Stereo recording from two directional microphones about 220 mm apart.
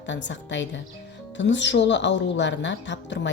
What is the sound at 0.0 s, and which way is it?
Speech, 55° left (ahead or behind).